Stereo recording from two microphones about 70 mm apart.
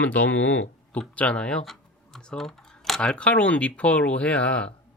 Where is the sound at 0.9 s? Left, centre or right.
Centre.